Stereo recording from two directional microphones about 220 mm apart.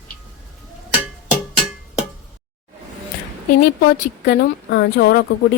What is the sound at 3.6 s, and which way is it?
A woman's voice, 50° left (ahead or behind).